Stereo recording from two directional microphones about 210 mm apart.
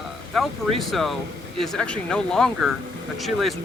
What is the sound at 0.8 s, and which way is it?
Speech, centre (ahead or behind).